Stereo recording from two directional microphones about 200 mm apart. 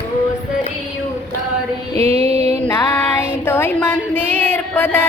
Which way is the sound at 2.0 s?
30° right (ahead or behind).